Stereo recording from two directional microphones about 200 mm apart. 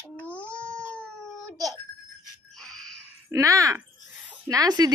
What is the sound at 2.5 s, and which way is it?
Music, 5° left (ahead or behind).